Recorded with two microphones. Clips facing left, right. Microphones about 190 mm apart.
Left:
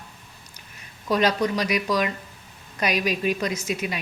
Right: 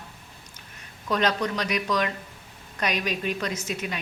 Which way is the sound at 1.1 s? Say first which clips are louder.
Left 3 dB; 10° left (ahead or behind).